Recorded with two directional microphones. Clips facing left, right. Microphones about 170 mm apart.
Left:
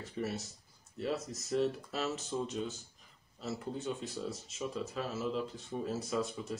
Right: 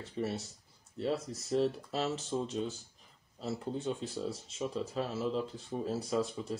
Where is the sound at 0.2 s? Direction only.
30° right (ahead or behind).